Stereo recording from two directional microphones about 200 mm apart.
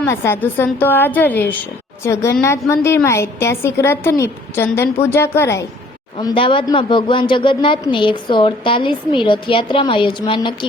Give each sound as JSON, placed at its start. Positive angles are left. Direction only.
{"t": 0.0, "sound": "a woman's voice", "side_deg": 10}
{"t": 6.1, "sound": "a woman's voice", "side_deg": 25}